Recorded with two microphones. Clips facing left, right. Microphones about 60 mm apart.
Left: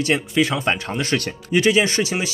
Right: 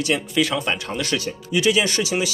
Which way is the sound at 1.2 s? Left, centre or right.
Left.